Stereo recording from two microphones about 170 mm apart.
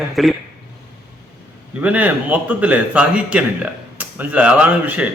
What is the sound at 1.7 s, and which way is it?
A man's voice, 10° right (ahead or behind).